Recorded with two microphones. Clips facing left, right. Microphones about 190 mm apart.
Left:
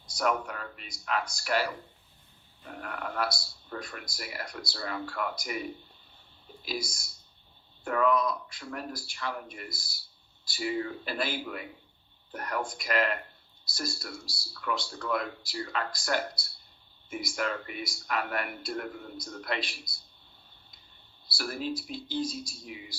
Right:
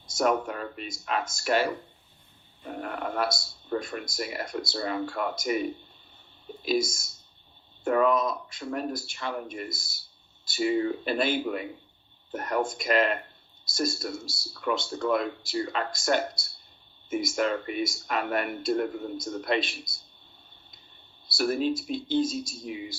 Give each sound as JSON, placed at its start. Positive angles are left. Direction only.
{"t": 0.2, "sound": "speech", "side_deg": -25}
{"t": 6.7, "sound": "speech", "side_deg": -25}
{"t": 21.3, "sound": "speech", "side_deg": -25}